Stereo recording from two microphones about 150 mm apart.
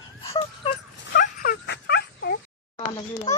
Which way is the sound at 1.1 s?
80° left.